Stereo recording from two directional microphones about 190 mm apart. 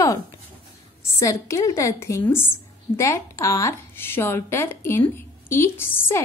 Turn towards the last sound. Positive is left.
turn(degrees=10)  # may be behind; listen again after turning